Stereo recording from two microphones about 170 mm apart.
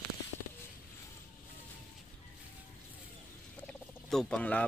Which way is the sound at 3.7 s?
5° left (ahead or behind).